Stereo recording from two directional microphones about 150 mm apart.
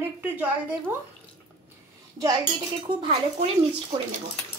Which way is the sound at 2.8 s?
35° right (ahead or behind).